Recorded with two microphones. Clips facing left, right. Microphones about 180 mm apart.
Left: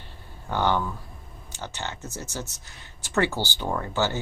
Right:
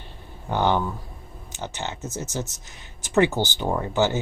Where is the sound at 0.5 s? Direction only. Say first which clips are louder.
Right 2 dB; 15° right (ahead or behind).